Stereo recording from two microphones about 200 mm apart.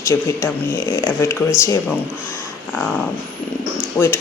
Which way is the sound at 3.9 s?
10° left (ahead or behind).